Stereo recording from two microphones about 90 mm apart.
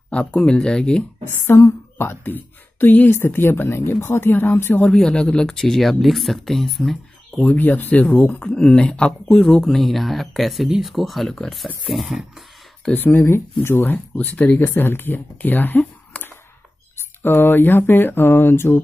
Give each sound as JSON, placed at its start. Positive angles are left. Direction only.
{"t": 0.1, "sound": "speech", "side_deg": 10}
{"t": 1.3, "sound": "speech", "side_deg": 30}
{"t": 4.8, "sound": "speech", "side_deg": 10}
{"t": 7.5, "sound": "speech", "side_deg": 20}
{"t": 12.9, "sound": "speech", "side_deg": 20}